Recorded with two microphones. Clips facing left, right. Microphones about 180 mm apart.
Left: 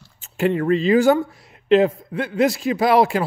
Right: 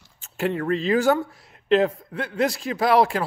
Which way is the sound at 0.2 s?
Centre (ahead or behind).